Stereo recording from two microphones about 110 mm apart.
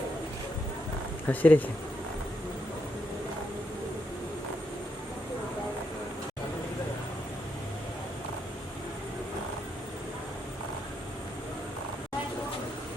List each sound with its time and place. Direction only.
1.3 s speech: 15° left (ahead or behind)